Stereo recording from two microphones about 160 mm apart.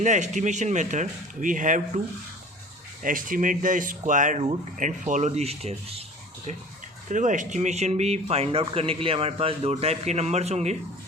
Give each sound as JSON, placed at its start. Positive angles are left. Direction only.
{"t": 0.0, "sound": "a man's voice", "side_deg": -50}
{"t": 3.0, "sound": "a man's voice", "side_deg": -55}
{"t": 7.1, "sound": "speech", "side_deg": -50}